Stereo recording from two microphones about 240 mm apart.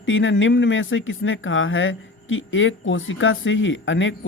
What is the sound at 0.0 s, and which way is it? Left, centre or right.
Speech, left.